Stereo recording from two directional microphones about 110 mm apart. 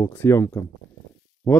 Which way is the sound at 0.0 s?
20° left (ahead or behind).